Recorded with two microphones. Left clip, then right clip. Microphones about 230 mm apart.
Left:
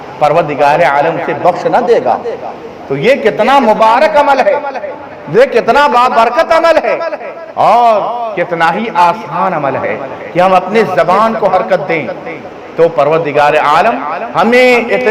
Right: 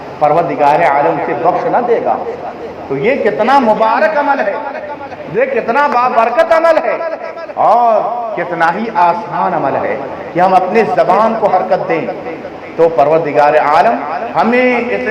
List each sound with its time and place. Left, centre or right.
0.2 s a man's voice: left
5.4 s a man's voice: left